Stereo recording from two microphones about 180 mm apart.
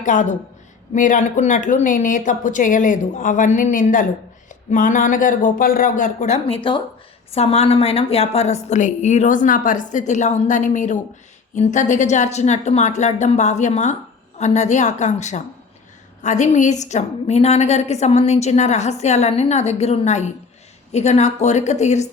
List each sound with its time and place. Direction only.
0.0 s a woman's voice: 45° left (ahead or behind)